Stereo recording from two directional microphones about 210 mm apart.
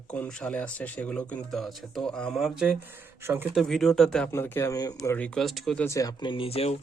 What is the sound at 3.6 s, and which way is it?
Speech, centre (ahead or behind).